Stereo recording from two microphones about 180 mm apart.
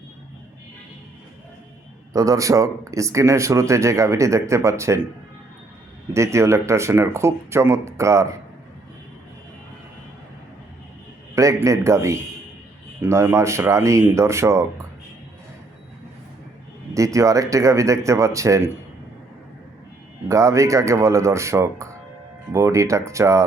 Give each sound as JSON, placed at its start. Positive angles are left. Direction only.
{"t": 2.1, "sound": "speech", "side_deg": -20}
{"t": 6.1, "sound": "speech", "side_deg": -15}
{"t": 11.3, "sound": "speech", "side_deg": -15}
{"t": 16.9, "sound": "speech", "side_deg": -15}
{"t": 20.2, "sound": "speech", "side_deg": -15}